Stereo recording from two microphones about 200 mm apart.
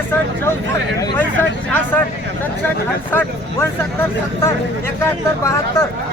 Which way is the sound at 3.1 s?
10° left (ahead or behind).